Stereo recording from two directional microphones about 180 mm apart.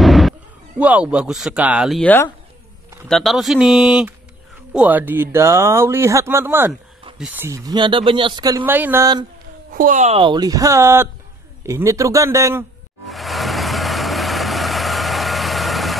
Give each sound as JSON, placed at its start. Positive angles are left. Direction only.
{"t": 0.0, "sound": "a sound", "side_deg": 0}
{"t": 0.7, "sound": "speech", "side_deg": -5}
{"t": 8.6, "sound": "speech", "side_deg": -10}
{"t": 9.7, "sound": "speech", "side_deg": -50}
{"t": 13.1, "sound": "vehicle", "side_deg": 0}